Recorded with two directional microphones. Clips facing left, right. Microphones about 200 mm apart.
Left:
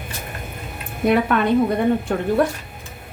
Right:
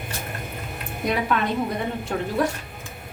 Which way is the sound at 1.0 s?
55° left (ahead or behind).